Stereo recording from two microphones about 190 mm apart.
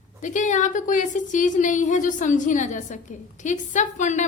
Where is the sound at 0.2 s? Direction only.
40° left (ahead or behind).